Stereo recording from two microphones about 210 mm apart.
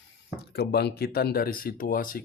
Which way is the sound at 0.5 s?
50° left (ahead or behind).